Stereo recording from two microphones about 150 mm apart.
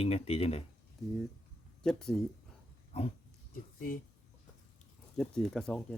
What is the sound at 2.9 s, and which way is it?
Speech, 45° left (ahead or behind).